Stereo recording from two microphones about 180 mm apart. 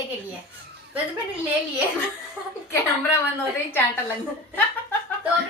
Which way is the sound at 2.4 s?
5° right (ahead or behind).